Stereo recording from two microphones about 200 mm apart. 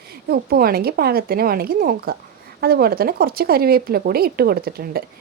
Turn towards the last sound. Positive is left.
turn(degrees=-50)  # may be behind; listen again after turning